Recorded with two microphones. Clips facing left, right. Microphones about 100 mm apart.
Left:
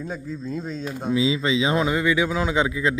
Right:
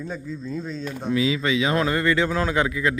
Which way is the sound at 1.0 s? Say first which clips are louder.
Left 1 dB; 20° left (ahead or behind).